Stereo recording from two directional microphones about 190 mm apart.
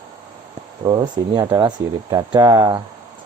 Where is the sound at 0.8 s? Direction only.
25° right (ahead or behind).